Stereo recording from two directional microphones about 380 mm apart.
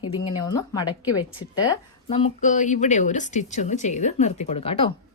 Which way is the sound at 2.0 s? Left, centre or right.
Centre.